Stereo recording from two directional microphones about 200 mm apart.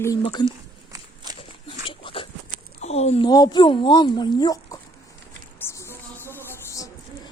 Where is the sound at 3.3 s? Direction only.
20° left (ahead or behind).